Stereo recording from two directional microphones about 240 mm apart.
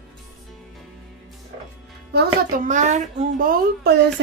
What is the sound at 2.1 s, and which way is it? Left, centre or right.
Speech, right.